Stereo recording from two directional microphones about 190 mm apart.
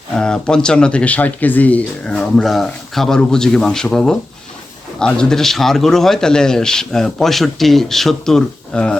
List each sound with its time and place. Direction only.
0.2 s speech: 5° left (ahead or behind)